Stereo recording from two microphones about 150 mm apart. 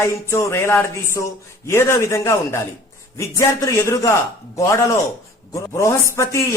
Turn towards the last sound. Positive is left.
turn(degrees=20)  # may be behind; listen again after turning